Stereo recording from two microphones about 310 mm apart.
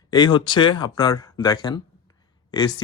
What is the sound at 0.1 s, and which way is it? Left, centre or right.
Speech, centre.